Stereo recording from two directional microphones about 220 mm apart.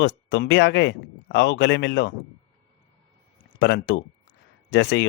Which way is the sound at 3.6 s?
50° left (ahead or behind).